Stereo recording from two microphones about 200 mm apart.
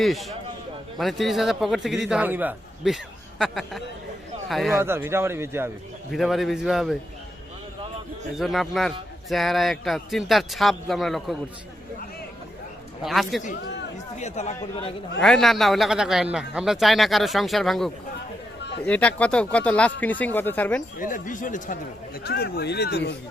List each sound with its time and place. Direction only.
0.0 s a man's voice: centre (ahead or behind)
4.8 s a man's voice: 10° right (ahead or behind)
6.1 s a man's voice: centre (ahead or behind)
8.4 s a man's voice: centre (ahead or behind)
13.0 s a man's voice: centre (ahead or behind)
14.2 s speech: 35° left (ahead or behind)
15.2 s a man's voice: centre (ahead or behind)
21.0 s a man's voice: 40° left (ahead or behind)